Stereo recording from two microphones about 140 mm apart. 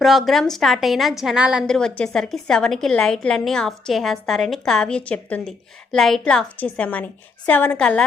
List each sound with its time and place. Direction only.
0.0 s a woman's voice: centre (ahead or behind)
1.6 s a woman's voice: 5° left (ahead or behind)